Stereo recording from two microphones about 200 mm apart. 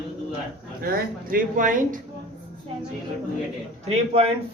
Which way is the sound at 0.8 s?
45° right (ahead or behind).